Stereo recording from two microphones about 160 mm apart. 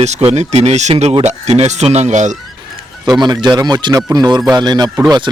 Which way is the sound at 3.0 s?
25° right (ahead or behind).